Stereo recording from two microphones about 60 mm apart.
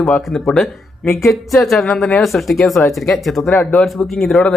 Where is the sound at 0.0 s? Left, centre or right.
Centre.